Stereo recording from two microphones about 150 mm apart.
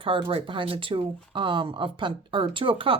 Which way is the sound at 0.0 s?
35° right (ahead or behind).